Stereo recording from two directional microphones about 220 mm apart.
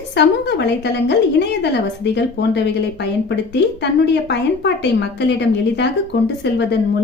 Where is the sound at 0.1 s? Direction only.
50° left (ahead or behind).